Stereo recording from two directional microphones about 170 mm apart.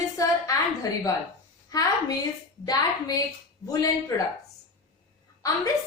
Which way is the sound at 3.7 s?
20° left (ahead or behind).